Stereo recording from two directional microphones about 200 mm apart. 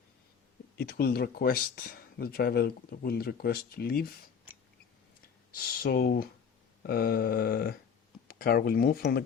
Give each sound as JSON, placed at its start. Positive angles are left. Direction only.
{"t": 0.8, "sound": "speech", "side_deg": 50}
{"t": 5.5, "sound": "speech", "side_deg": 50}